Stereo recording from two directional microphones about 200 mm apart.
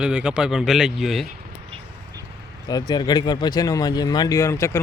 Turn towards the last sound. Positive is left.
turn(degrees=15)  # may be behind; listen again after turning